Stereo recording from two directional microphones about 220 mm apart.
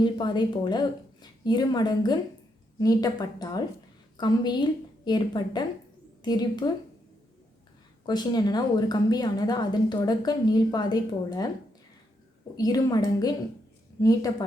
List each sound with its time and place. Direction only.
0.0 s a woman's voice: 20° left (ahead or behind)
8.0 s a woman's voice: 20° left (ahead or behind)
12.5 s a woman's voice: 15° left (ahead or behind)